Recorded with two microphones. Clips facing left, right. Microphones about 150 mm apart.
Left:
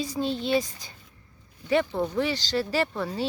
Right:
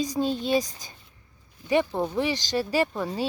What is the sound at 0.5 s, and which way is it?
Speech, 40° right (ahead or behind).